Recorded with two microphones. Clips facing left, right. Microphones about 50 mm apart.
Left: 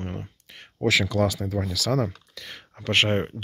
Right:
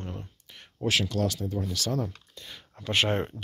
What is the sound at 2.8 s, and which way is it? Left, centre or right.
Speech, left.